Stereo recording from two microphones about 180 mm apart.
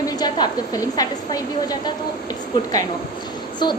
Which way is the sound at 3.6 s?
25° left (ahead or behind).